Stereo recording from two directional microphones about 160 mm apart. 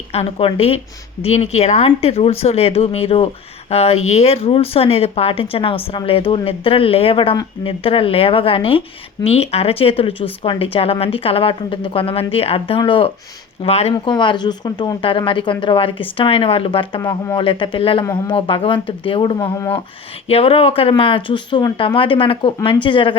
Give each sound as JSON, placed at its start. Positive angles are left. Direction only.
{"t": 0.1, "sound": "speech", "side_deg": 35}
{"t": 14.1, "sound": "speech", "side_deg": 30}
{"t": 17.0, "sound": "speech", "side_deg": 20}
{"t": 17.4, "sound": "speech", "side_deg": 30}